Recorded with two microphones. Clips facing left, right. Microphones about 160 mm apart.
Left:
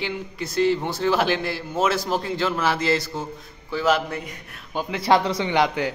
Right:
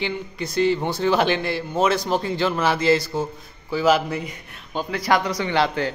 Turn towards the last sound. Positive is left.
turn(degrees=15)  # may be behind; listen again after turning